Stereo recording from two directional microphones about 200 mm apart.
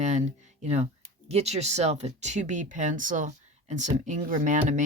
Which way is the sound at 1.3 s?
30° right (ahead or behind).